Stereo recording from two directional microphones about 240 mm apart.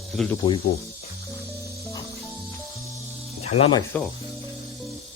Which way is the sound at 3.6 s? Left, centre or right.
Left.